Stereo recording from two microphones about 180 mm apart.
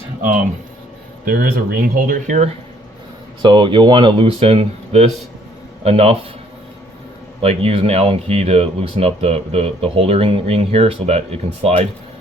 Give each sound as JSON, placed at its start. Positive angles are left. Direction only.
{"t": 1.2, "sound": "speech", "side_deg": -55}
{"t": 3.4, "sound": "speech", "side_deg": -25}
{"t": 7.4, "sound": "speech", "side_deg": -35}